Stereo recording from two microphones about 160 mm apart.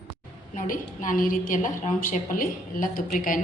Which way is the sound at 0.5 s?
55° left (ahead or behind).